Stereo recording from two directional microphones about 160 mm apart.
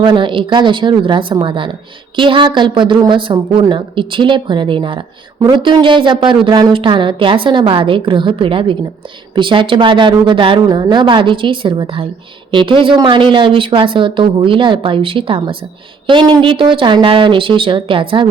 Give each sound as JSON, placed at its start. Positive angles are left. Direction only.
{"t": 0.0, "sound": "a woman's voice", "side_deg": -30}